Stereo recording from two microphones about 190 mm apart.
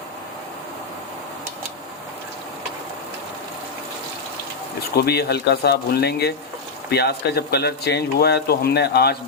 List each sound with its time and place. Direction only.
4.9 s speech: 55° left (ahead or behind)